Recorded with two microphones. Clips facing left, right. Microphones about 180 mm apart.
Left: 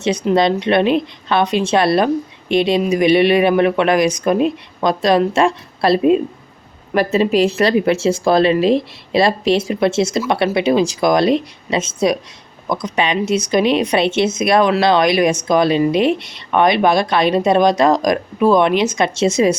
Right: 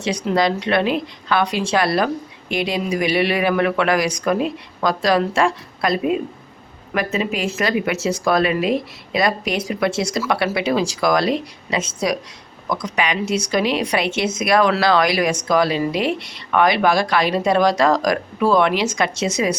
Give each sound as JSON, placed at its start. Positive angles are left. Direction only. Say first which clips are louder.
{"t": 0.3, "sound": "a woman's voice", "louder": "left 4 dB", "side_deg": 25}